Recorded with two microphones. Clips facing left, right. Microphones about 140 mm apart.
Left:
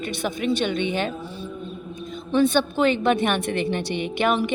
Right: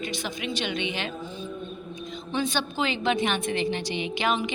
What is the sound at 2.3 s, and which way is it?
A woman's voice, 55° left (ahead or behind).